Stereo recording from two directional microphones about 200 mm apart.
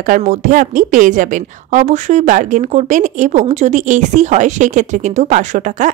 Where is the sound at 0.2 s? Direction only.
40° right (ahead or behind).